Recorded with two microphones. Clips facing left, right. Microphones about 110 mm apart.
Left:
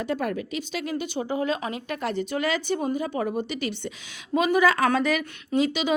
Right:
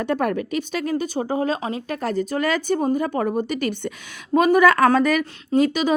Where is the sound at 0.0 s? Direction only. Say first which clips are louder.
Right 5 dB; 60° right (ahead or behind).